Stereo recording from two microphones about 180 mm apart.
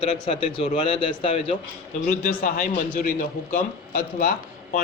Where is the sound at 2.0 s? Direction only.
55° left (ahead or behind).